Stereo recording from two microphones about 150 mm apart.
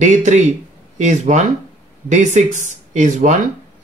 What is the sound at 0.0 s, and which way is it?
Speech, 55° right (ahead or behind).